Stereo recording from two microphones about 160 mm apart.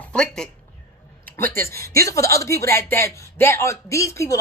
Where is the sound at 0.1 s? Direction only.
5° left (ahead or behind).